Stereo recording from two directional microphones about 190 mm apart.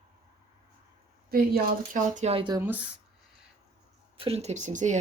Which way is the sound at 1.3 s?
55° right (ahead or behind).